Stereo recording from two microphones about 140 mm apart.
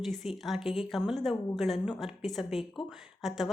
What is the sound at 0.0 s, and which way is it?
A woman's voice, centre (ahead or behind).